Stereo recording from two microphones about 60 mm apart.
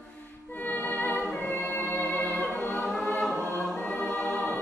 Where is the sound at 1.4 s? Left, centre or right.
Left.